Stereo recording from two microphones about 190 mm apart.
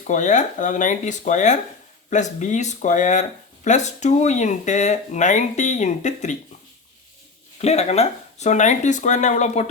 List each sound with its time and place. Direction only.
0.1 s speech: 40° left (ahead or behind)
7.6 s speech: 35° left (ahead or behind)